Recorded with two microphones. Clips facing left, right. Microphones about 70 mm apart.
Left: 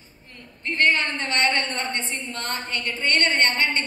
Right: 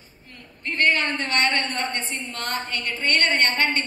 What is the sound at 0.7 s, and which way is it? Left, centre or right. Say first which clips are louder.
A woman's voice: even; left.